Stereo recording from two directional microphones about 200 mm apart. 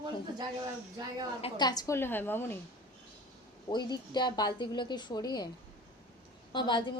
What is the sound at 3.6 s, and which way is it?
A woman's voice, 20° left (ahead or behind).